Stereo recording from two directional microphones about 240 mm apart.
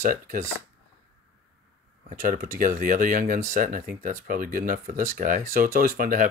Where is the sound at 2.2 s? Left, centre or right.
Right.